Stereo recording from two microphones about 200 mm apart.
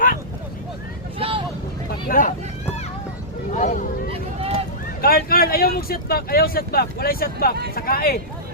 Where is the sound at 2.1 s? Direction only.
45° left (ahead or behind).